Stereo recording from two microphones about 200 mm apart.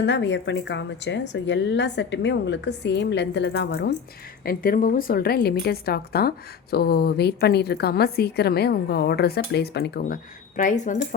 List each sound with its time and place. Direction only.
0.0 s a woman's voice: 60° left (ahead or behind)
10.6 s speech: 40° left (ahead or behind)